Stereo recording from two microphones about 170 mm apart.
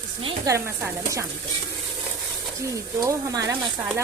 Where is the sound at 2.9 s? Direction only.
20° right (ahead or behind).